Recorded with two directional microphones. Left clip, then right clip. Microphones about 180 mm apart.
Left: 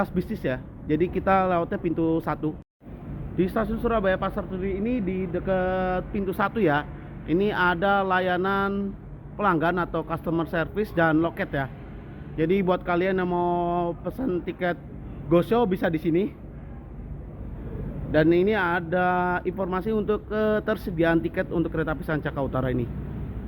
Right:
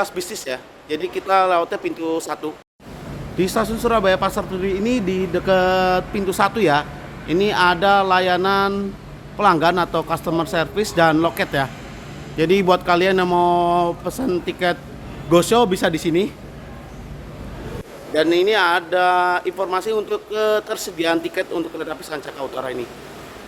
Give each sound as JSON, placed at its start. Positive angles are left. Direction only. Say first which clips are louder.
{"t": 0.0, "sound": "speech", "louder": "right 4 dB", "side_deg": -15}
{"t": 18.1, "sound": "speech", "louder": "right 4 dB", "side_deg": -10}